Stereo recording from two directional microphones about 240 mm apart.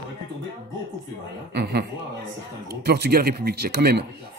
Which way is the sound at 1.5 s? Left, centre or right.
Right.